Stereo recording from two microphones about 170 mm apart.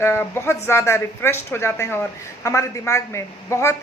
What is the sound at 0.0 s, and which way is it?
A woman's voice, 15° left (ahead or behind).